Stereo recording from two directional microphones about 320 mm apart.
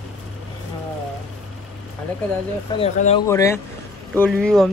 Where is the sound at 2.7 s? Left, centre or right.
Centre.